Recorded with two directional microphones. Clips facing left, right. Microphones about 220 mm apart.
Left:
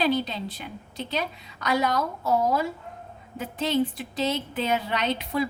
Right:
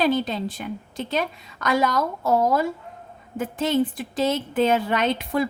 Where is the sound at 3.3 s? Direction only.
50° right (ahead or behind).